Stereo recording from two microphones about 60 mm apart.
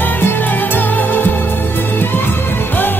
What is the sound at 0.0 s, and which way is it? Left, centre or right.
Music, left.